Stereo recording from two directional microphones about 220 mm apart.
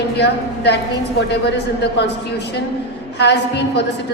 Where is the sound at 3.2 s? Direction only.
50° left (ahead or behind).